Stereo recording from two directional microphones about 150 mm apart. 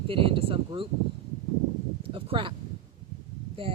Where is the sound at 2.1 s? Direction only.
35° right (ahead or behind).